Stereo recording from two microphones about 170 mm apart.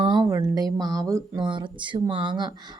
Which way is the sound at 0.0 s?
25° right (ahead or behind).